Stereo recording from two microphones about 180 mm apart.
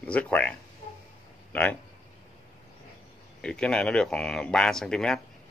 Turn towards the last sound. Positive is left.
turn(degrees=5)  # may be behind; listen again after turning